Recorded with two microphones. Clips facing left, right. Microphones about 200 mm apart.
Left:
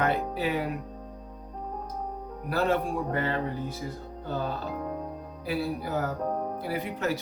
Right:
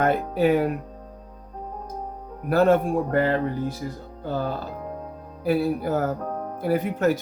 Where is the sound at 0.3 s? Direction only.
50° right (ahead or behind).